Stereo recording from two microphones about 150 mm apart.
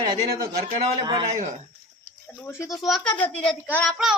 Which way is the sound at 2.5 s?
20° left (ahead or behind).